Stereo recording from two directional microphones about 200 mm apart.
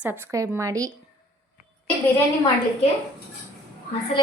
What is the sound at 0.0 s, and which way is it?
Speech, 10° right (ahead or behind).